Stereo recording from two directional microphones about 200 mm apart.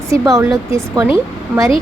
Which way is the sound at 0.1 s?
15° right (ahead or behind).